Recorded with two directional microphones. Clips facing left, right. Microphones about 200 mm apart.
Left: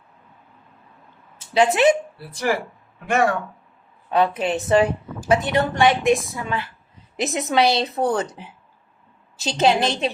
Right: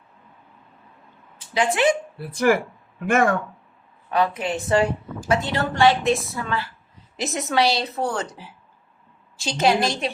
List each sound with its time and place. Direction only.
1.5 s a woman's voice: 25° left (ahead or behind)
2.1 s speech: 50° right (ahead or behind)
4.1 s a woman's voice: 20° left (ahead or behind)